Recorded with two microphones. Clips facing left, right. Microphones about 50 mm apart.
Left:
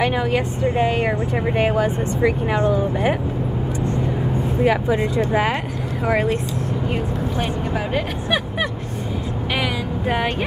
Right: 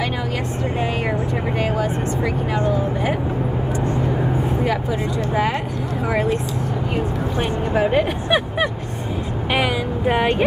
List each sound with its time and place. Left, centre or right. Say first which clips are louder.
0.8 s speech: left 2 dB; centre
1.6 s speech: left 3 dB; left
4.6 s speech: left 3 dB; centre
7.3 s speech: right 6 dB; centre
9.5 s a sound: right 4 dB; centre